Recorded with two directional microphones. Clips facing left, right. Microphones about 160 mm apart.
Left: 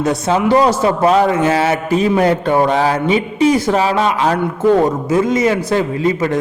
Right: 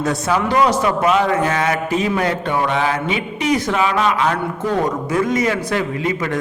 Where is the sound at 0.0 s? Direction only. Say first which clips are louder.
Left 4 dB; 25° left (ahead or behind).